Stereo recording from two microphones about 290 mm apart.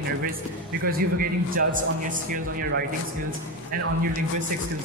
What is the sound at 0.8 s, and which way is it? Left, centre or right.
A man's voice, right.